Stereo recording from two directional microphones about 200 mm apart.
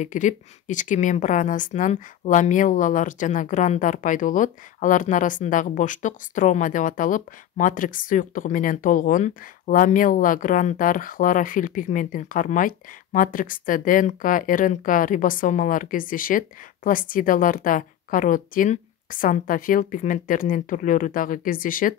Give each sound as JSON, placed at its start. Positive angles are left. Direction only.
{"t": 0.0, "sound": "a woman's voice", "side_deg": 40}